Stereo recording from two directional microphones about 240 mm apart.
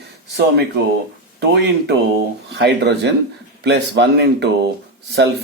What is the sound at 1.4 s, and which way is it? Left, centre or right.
Speech, right.